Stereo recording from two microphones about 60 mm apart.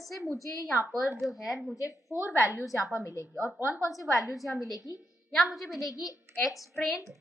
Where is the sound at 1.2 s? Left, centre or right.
Centre.